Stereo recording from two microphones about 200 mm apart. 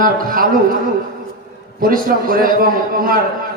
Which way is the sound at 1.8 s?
45° right (ahead or behind).